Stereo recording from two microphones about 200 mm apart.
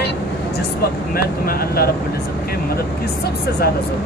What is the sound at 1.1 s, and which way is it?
Speech, 50° left (ahead or behind).